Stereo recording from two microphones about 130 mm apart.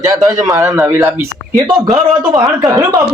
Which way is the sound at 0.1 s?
25° right (ahead or behind).